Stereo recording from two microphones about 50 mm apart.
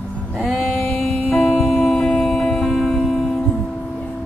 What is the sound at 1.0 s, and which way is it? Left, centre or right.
Music, centre.